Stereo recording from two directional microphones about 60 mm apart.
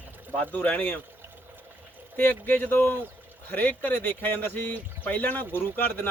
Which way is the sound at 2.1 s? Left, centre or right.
Left.